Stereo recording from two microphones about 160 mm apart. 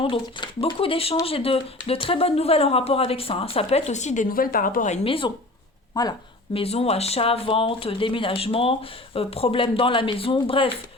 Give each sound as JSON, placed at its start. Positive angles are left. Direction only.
{"t": 0.0, "sound": "speech", "side_deg": 30}
{"t": 5.0, "sound": "speech", "side_deg": 35}
{"t": 6.6, "sound": "speech", "side_deg": 40}